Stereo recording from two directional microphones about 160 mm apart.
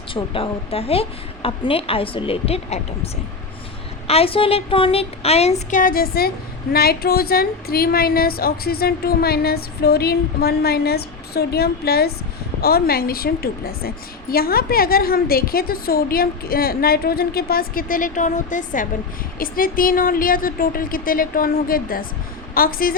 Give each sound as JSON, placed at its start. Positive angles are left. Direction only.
{"t": 0.1, "sound": "a woman's voice", "side_deg": 30}